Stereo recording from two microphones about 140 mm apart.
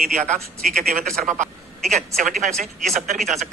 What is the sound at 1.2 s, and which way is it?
Speech, 60° right (ahead or behind).